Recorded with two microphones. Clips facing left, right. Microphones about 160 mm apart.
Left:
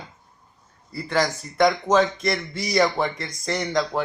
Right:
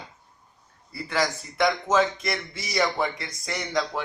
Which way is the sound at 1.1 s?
40° left (ahead or behind).